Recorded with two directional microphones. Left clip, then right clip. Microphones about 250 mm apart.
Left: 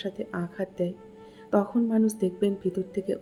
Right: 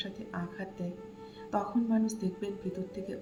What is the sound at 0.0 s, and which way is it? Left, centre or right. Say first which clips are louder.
Speech: left 7 dB; left.